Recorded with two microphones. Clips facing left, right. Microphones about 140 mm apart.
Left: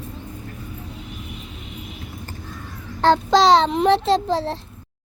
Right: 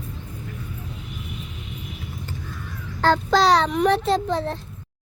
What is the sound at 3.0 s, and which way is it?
A child's voice, 25° left (ahead or behind).